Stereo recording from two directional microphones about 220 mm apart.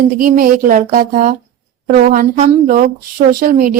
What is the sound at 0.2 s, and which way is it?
Speech, 40° right (ahead or behind).